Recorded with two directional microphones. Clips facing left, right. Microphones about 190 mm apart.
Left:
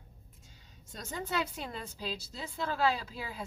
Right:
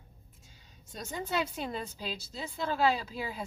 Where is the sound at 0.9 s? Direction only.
20° right (ahead or behind).